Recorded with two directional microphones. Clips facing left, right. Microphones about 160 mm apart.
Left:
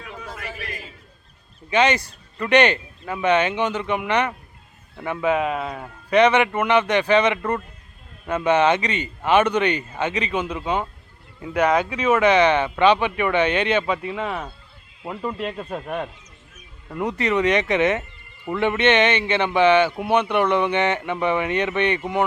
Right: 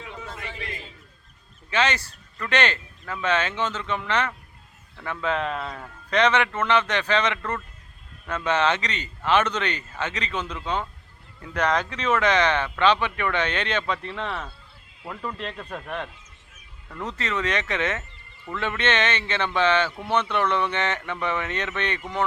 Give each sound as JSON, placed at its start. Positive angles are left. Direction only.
{"t": 0.3, "sound": "chatter", "side_deg": -25}
{"t": 1.7, "sound": "speech", "side_deg": 15}
{"t": 16.9, "sound": "speech", "side_deg": 15}